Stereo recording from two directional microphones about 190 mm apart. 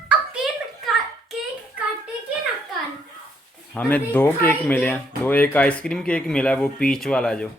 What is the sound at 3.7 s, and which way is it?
Speech, 10° left (ahead or behind).